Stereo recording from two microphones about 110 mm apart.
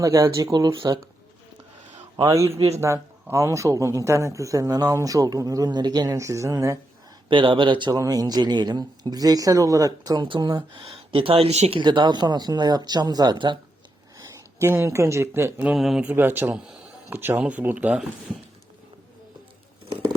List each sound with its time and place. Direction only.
0.0 s speech: 30° right (ahead or behind)
2.3 s speech: 30° right (ahead or behind)
7.3 s speech: 50° right (ahead or behind)
7.9 s speech: 35° right (ahead or behind)
10.4 s speech: 50° right (ahead or behind); by 11.8 s 75° right (ahead or behind)
11.8 s speech: 45° right (ahead or behind)
14.2 s speech: 25° right (ahead or behind)
15.6 s a man's voice: 5° right (ahead or behind)
16.0 s speech: 20° right (ahead or behind)